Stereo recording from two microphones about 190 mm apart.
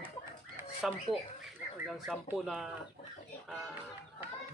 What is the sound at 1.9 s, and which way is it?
Speech, centre (ahead or behind).